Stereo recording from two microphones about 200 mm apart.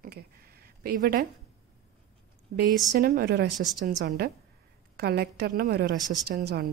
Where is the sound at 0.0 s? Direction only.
50° right (ahead or behind).